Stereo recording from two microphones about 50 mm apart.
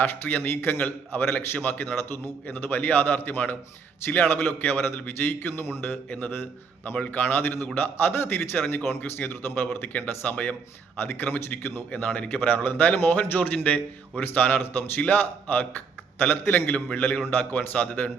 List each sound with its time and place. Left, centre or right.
0.0 s a man's voice: left
1.2 s a man's voice: left
6.3 s a man's voice: left
6.9 s a man's voice: left
11.0 s a man's voice: left